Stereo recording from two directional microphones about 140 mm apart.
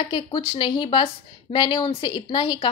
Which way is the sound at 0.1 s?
35° left (ahead or behind).